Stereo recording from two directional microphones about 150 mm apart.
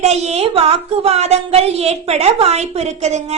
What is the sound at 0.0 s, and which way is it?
A woman's voice, 45° right (ahead or behind).